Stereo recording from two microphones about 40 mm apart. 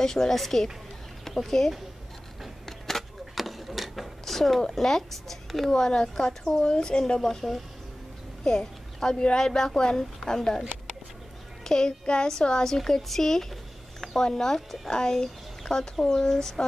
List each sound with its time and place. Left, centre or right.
0.0 s speech: centre
0.3 s speech: centre
2.6 s a sound: centre
5.7 s speech: centre
7.2 s speech: centre
8.5 s a woman's voice: centre
11.6 s child singing: centre
12.3 s speech: centre